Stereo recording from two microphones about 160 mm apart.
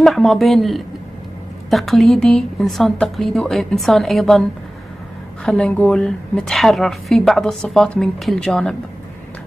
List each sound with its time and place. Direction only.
0.0 s a woman's voice: centre (ahead or behind)